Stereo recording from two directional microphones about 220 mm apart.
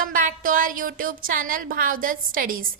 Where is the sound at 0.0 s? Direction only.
40° right (ahead or behind).